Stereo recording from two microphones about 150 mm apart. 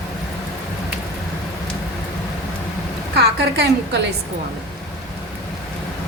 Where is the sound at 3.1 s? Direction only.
90° right.